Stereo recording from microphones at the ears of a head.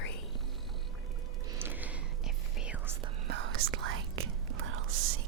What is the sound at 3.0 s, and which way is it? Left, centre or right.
Whispering, right.